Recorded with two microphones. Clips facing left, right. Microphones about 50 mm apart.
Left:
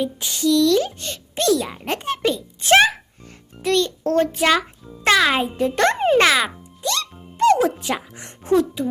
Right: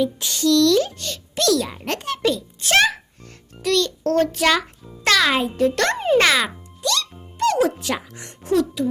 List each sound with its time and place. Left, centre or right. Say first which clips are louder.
0.0 s speech: right 1 dB; centre
2.0 s a sound: right 1 dB; left
3.6 s music: left 1 dB; left
4.4 s speech: left 1 dB; centre
6.1 s speech: right 2 dB; centre
6.8 s music: right 1 dB; left
8.1 s speech: left 2 dB; left